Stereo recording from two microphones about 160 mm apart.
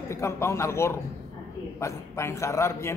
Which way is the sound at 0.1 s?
15° left (ahead or behind).